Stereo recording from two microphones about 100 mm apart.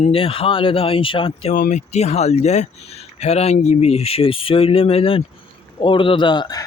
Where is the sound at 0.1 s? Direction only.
70° left (ahead or behind).